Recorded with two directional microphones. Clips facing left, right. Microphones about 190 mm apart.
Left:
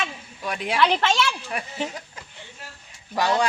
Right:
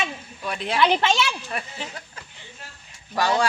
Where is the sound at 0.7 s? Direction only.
5° right (ahead or behind).